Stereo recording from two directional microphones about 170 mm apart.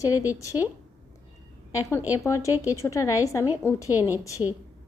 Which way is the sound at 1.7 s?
15° left (ahead or behind).